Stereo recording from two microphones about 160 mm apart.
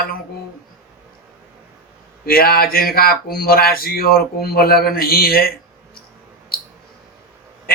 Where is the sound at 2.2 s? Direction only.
70° left (ahead or behind).